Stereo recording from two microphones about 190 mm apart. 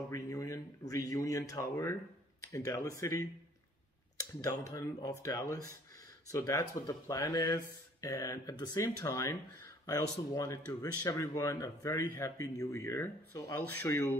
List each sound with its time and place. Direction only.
0.1 s speech: 15° left (ahead or behind)